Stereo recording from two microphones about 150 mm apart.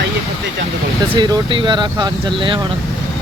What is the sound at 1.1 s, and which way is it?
Speech, 35° right (ahead or behind).